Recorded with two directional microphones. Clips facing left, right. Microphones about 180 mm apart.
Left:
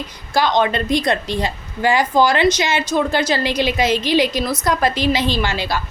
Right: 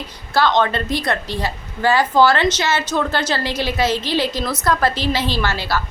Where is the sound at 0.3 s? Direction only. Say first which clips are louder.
Even; 15° left (ahead or behind).